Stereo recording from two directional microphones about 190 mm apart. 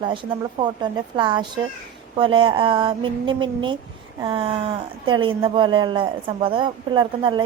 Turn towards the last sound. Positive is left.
turn(degrees=-25)  # may be behind; listen again after turning